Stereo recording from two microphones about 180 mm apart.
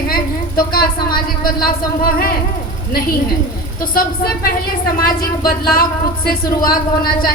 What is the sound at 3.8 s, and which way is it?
Speech, 50° left (ahead or behind).